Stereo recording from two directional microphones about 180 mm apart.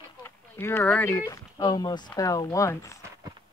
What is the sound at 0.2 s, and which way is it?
Speech, 10° left (ahead or behind).